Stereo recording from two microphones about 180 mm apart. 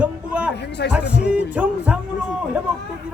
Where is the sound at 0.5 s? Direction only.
70° left (ahead or behind).